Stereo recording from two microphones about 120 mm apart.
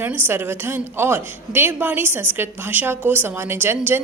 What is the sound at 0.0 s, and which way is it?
A woman's voice, 15° right (ahead or behind).